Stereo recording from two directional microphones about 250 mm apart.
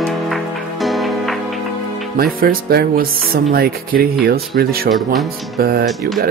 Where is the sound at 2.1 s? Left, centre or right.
Right.